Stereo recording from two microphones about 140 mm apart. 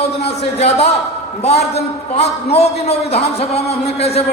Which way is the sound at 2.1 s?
45° left (ahead or behind).